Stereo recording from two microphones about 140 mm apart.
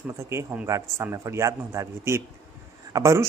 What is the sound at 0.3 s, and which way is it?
A woman's voice, 15° right (ahead or behind).